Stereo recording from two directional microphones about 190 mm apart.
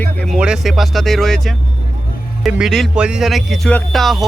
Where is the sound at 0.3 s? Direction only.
5° right (ahead or behind).